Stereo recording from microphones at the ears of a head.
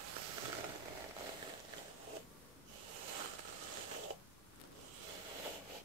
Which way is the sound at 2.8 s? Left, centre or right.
Right.